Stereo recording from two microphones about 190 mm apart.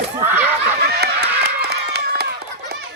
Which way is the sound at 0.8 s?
60° right (ahead or behind).